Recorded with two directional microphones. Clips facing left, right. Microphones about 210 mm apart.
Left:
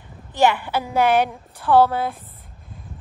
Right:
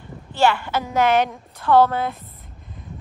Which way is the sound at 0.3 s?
15° left (ahead or behind).